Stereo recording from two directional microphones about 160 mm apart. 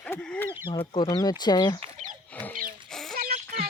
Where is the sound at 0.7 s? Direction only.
30° left (ahead or behind).